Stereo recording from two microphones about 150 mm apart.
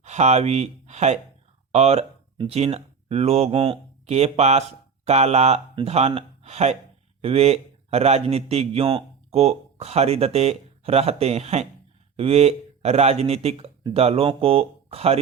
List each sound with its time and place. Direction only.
0.0 s a man's voice: 50° right (ahead or behind)